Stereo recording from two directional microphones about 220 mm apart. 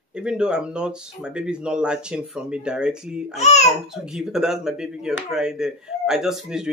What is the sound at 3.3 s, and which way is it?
Speech, 30° left (ahead or behind).